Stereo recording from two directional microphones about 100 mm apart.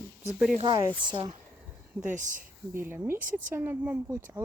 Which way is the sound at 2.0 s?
15° right (ahead or behind).